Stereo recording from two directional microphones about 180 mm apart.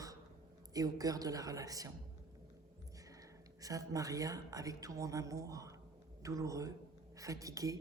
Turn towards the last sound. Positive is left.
turn(degrees=-20)  # may be behind; listen again after turning